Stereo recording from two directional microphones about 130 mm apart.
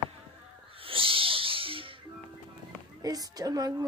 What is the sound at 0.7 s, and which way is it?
Wheeze, 45° right (ahead or behind).